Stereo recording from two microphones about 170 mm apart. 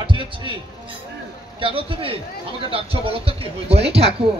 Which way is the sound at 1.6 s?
30° right (ahead or behind).